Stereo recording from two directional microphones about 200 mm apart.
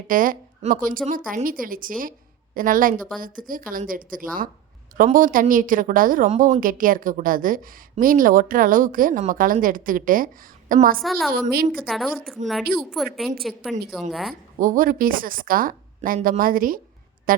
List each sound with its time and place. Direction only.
0.1 s a woman's voice: 45° right (ahead or behind)
11.0 s a woman's voice: centre (ahead or behind)
11.5 s speech: 45° right (ahead or behind)
11.9 s a woman's voice: centre (ahead or behind)
14.6 s speech: 45° right (ahead or behind)